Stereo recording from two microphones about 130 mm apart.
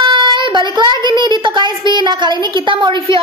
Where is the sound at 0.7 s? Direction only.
35° right (ahead or behind).